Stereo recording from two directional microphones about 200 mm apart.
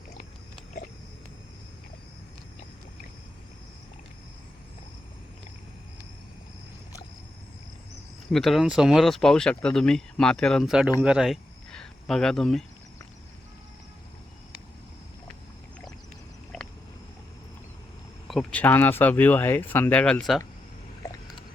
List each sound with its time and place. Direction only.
8.3 s speech: centre (ahead or behind)
16.5 s a sound: centre (ahead or behind)
18.3 s speech: 5° left (ahead or behind)
21.0 s vehicle: 15° left (ahead or behind)